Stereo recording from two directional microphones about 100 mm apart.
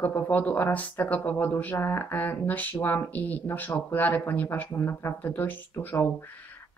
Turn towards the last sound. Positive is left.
turn(degrees=20)  # may be behind; listen again after turning